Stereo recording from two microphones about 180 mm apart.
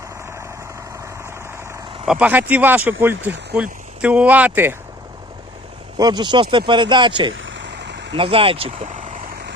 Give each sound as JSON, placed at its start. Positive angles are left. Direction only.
{"t": 2.0, "sound": "speech", "side_deg": -5}
{"t": 6.0, "sound": "speech", "side_deg": -20}
{"t": 7.3, "sound": "a sound", "side_deg": -90}
{"t": 8.1, "sound": "speech", "side_deg": -30}